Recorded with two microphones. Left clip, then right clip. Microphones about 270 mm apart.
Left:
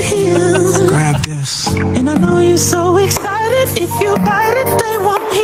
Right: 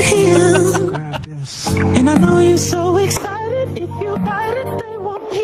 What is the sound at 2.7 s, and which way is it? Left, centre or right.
Music, centre.